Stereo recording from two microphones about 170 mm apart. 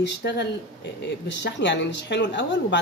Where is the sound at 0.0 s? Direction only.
85° left.